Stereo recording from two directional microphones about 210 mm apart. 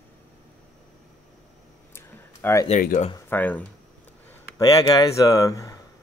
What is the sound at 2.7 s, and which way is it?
Speech, 35° left (ahead or behind).